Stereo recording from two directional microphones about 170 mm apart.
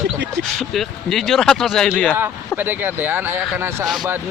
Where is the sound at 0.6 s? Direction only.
Centre (ahead or behind).